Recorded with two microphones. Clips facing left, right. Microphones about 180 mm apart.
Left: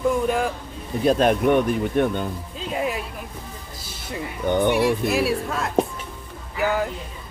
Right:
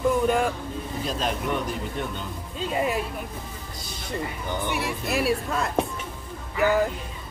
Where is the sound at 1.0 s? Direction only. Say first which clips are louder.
Left 12 dB; 55° left (ahead or behind).